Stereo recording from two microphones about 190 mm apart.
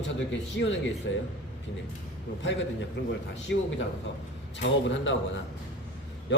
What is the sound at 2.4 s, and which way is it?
A man's voice, 70° left (ahead or behind).